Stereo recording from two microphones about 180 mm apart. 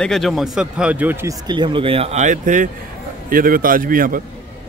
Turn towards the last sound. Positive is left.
turn(degrees=-50)  # may be behind; listen again after turning